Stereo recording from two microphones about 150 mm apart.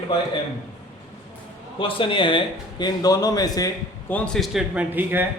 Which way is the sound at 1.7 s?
35° left (ahead or behind).